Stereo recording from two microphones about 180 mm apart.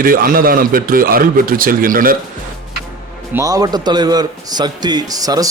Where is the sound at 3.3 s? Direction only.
20° right (ahead or behind).